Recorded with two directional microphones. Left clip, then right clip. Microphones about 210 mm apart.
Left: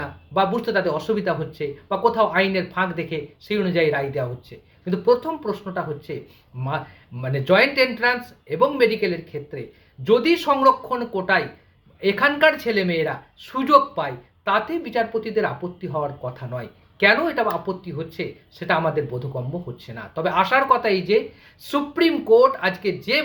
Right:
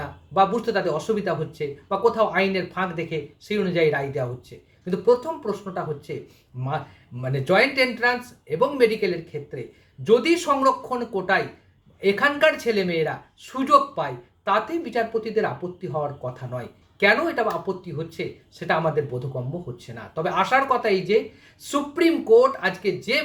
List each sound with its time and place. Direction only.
0.0 s speech: 5° left (ahead or behind)